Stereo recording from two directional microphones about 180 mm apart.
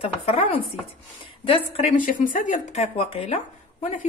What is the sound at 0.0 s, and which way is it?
A woman's voice, 35° left (ahead or behind).